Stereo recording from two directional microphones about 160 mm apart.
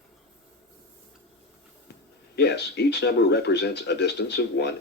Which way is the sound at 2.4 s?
90° left.